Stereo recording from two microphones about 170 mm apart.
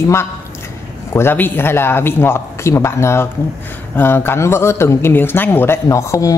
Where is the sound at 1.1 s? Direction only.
10° left (ahead or behind).